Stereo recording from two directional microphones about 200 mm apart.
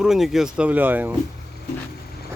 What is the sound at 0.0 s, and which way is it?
Speech, centre (ahead or behind).